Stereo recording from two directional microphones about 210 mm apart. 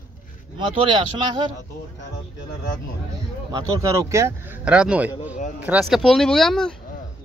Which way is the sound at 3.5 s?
15° right (ahead or behind).